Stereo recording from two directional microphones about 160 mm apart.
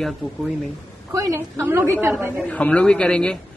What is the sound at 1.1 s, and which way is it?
Speech, 20° right (ahead or behind).